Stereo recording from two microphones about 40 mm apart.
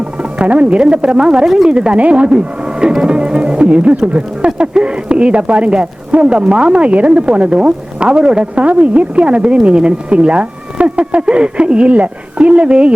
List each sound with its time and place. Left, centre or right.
0.3 s speech: right